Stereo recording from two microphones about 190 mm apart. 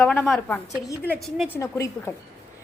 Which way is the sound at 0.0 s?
5° left (ahead or behind).